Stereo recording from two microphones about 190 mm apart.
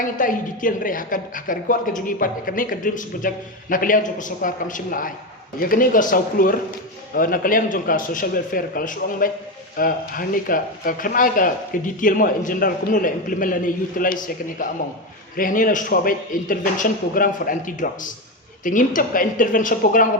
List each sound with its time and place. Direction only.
0.0 s a woman's voice: 45° left (ahead or behind)